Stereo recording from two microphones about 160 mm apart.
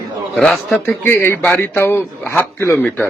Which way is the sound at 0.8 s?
15° left (ahead or behind).